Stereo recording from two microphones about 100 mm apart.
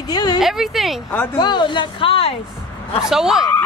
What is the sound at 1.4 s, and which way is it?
Speech, 50° left (ahead or behind).